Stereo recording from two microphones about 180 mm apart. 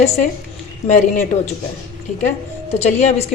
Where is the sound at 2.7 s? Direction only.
35° left (ahead or behind).